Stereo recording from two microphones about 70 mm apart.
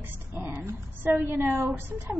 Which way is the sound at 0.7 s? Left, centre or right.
Right.